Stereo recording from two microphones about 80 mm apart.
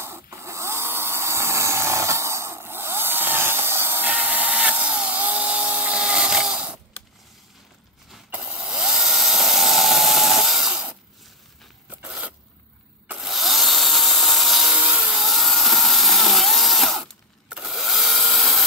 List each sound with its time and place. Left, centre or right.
0.0 s a sound: right; by 6.8 s centre
8.3 s tools: centre
11.9 s zipper: centre
13.2 s tools: centre
17.5 s wood: centre